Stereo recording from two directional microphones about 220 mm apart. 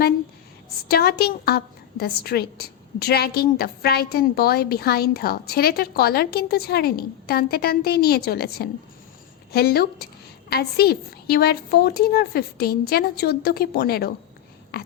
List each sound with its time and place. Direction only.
0.9 s a woman's voice: 45° left (ahead or behind)